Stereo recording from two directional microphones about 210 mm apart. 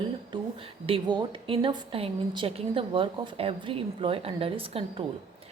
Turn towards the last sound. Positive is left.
turn(degrees=-25)  # may be behind; listen again after turning